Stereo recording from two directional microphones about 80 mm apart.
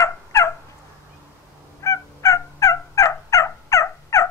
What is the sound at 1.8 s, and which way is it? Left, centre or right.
Fowl, left.